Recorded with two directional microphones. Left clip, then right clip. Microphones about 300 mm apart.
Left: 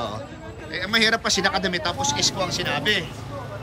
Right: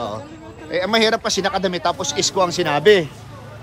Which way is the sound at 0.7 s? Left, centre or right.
Centre.